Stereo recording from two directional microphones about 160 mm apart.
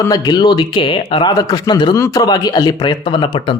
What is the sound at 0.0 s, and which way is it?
Speech, 25° left (ahead or behind).